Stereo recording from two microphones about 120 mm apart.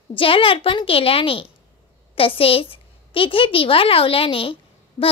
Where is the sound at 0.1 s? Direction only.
50° left (ahead or behind).